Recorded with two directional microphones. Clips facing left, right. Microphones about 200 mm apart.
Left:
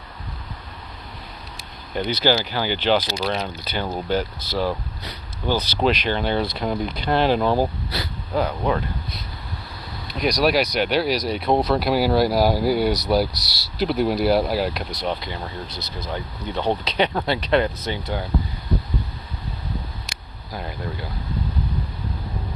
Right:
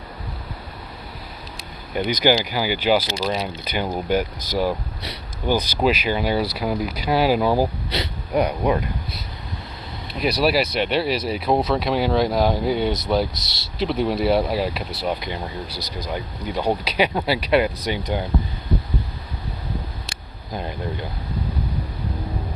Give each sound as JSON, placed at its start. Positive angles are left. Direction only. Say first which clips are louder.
{"t": 1.9, "sound": "speech", "louder": "right 2 dB", "side_deg": -10}
{"t": 7.9, "sound": "speech", "louder": "right 3 dB", "side_deg": -20}
{"t": 10.1, "sound": "speech", "louder": "even", "side_deg": -5}
{"t": 15.1, "sound": "speech", "louder": "right 2 dB", "side_deg": -15}
{"t": 20.1, "sound": "a sound", "louder": "right 3 dB", "side_deg": -25}